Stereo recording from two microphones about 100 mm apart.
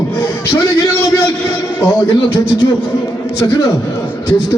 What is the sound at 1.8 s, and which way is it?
Speech, 40° left (ahead or behind).